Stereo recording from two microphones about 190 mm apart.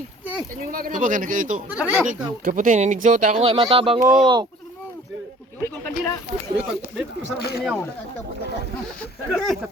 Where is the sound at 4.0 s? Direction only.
5° right (ahead or behind).